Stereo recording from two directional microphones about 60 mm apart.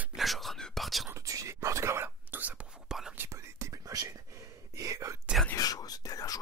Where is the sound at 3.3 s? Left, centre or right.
Right.